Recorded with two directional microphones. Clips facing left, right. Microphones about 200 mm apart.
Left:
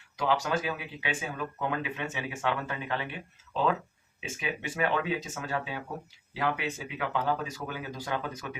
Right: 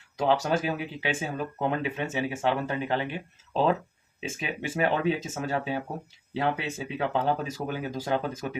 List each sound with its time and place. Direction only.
0.2 s speech: 25° right (ahead or behind)